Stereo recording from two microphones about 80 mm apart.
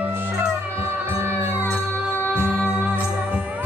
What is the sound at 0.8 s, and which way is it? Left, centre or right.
Music, right.